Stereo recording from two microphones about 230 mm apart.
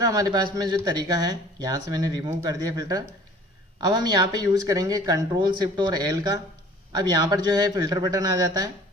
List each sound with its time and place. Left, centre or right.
0.0 s speech: centre